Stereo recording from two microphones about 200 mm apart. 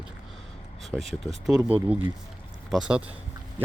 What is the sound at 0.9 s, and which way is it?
Speech, 10° right (ahead or behind).